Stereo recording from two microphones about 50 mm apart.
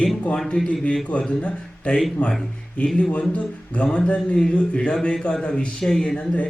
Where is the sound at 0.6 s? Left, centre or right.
Centre.